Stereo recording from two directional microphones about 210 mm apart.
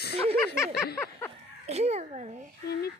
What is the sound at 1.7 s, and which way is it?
Speech, 30° right (ahead or behind).